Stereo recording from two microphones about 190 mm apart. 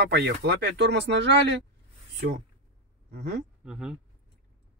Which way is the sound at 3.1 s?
65° right (ahead or behind).